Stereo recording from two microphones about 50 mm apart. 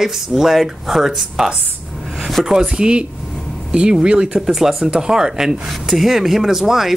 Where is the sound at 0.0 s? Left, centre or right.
Centre.